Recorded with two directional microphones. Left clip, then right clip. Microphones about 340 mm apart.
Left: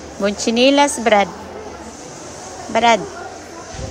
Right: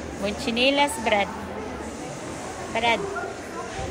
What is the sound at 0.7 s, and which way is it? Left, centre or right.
Speech, left.